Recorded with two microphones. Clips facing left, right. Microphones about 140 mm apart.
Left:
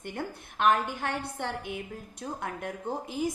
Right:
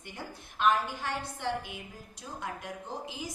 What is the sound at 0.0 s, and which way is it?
A woman's voice, 55° left (ahead or behind).